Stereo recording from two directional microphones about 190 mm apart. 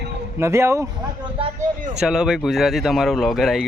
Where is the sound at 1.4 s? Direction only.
25° right (ahead or behind).